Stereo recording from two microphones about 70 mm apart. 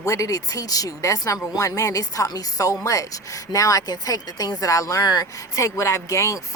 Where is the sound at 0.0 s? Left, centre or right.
Left.